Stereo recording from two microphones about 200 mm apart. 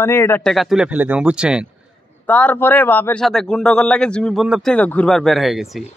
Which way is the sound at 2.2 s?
5° left (ahead or behind).